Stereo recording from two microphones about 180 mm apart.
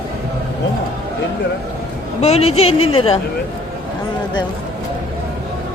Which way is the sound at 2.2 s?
35° left (ahead or behind).